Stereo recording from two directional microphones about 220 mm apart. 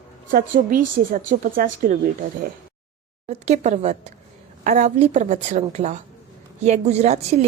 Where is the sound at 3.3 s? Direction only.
30° right (ahead or behind).